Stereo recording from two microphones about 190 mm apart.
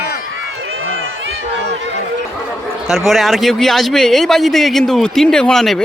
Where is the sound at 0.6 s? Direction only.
85° right.